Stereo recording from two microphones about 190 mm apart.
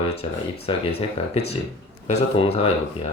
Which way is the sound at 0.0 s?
30° left (ahead or behind).